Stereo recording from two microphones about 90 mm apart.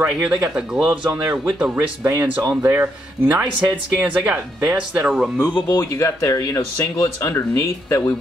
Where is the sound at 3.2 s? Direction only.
15° right (ahead or behind).